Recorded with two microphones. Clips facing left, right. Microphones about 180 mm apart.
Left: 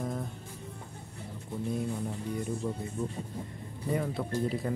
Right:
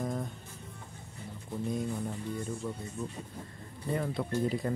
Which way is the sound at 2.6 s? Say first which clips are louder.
Left 3 dB; 15° left (ahead or behind).